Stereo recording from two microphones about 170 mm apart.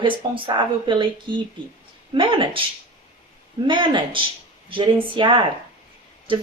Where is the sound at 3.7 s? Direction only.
30° right (ahead or behind).